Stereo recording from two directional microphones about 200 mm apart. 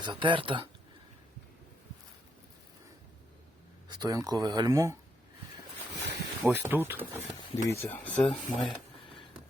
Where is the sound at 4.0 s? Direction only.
20° right (ahead or behind).